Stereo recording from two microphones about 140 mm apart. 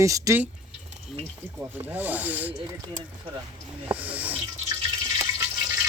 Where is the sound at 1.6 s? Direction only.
10° right (ahead or behind).